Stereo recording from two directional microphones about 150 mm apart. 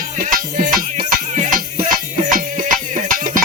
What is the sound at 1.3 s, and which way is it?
Music, 55° right (ahead or behind).